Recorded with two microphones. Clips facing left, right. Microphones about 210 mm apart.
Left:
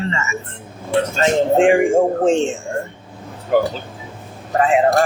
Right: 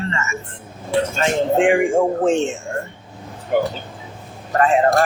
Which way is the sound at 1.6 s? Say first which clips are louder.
Left 2 dB; 25° left (ahead or behind).